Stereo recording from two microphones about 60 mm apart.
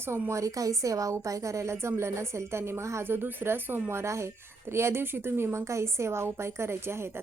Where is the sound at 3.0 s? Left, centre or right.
Right.